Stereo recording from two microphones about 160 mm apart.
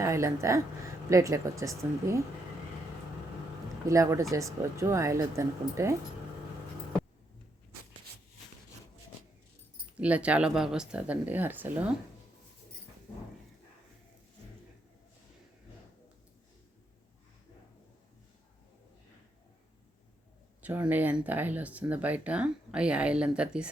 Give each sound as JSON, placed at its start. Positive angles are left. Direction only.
{"t": 0.0, "sound": "a woman's voice", "side_deg": -20}
{"t": 3.8, "sound": "speech", "side_deg": -20}
{"t": 10.0, "sound": "speech", "side_deg": -10}
{"t": 20.6, "sound": "speech", "side_deg": -10}